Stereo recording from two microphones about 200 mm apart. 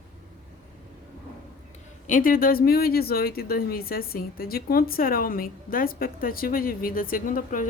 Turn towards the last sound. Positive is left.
turn(degrees=40)  # may be behind; listen again after turning